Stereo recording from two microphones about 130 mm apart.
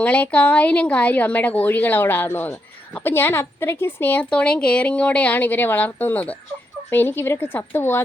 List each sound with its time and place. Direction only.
0.0 s a woman's voice: 10° left (ahead or behind)